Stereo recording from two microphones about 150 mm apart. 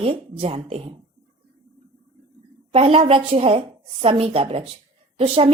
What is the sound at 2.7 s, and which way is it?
A woman's voice, 40° right (ahead or behind).